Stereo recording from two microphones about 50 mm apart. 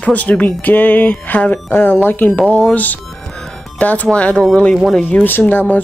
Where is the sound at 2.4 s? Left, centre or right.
Left.